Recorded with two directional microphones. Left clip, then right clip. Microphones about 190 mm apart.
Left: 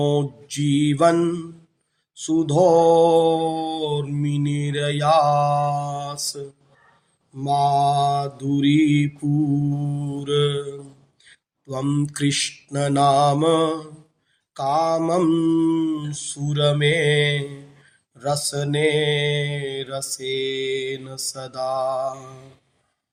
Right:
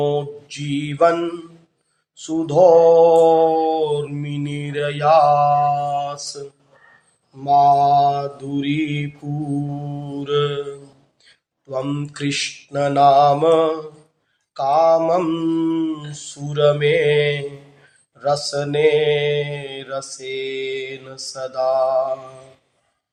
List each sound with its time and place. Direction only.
0.0 s mantra: 55° left (ahead or behind)
7.4 s mantra: 55° left (ahead or behind)
11.3 s speech: 55° left (ahead or behind)
14.5 s mantra: 55° left (ahead or behind)